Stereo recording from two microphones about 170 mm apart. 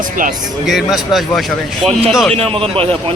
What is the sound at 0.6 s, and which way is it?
Speech, centre (ahead or behind).